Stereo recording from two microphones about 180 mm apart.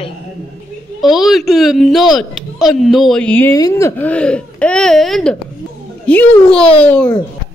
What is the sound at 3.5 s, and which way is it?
Speech, 15° left (ahead or behind).